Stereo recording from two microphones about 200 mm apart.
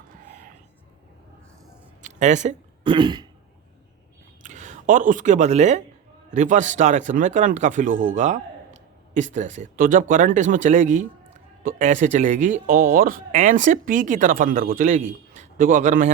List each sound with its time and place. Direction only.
2.0 s a sound: 35° right (ahead or behind)
2.8 s throat clearing: 20° right (ahead or behind)
4.4 s speech: 40° right (ahead or behind)